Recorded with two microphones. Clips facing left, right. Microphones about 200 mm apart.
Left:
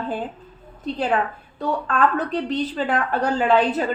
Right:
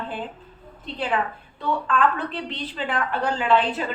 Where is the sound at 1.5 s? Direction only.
40° left (ahead or behind).